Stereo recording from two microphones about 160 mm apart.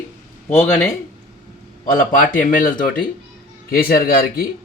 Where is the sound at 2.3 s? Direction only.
55° left (ahead or behind).